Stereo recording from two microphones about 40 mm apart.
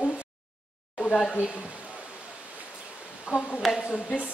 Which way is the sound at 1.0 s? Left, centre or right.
Centre.